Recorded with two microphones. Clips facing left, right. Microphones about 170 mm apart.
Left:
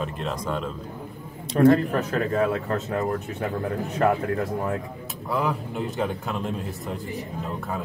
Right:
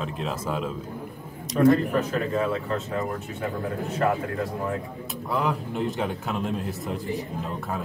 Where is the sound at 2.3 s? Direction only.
45° left (ahead or behind).